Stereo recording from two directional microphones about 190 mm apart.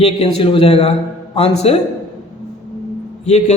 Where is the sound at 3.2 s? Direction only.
35° left (ahead or behind).